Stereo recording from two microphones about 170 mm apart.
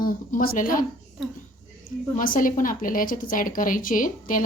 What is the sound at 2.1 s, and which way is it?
A woman's voice, 55° left (ahead or behind).